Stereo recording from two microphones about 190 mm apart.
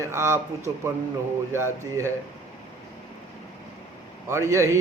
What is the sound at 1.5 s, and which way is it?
Speech, 15° right (ahead or behind).